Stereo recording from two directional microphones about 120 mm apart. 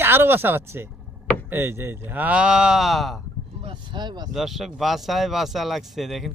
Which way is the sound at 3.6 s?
40° right (ahead or behind).